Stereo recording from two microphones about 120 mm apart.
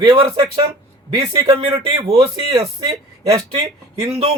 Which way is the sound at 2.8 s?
30° right (ahead or behind).